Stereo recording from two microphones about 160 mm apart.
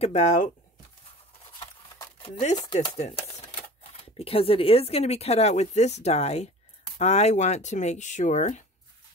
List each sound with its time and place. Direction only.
0.0 s speech: 50° left (ahead or behind)
2.2 s speech: 40° left (ahead or behind)
2.5 s speech: 25° left (ahead or behind)
2.9 s speech: 40° left (ahead or behind)